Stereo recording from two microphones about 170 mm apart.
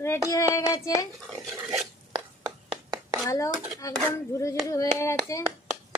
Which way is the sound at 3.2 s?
20° left (ahead or behind).